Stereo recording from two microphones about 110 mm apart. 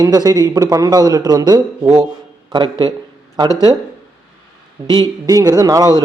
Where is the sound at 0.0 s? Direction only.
35° right (ahead or behind).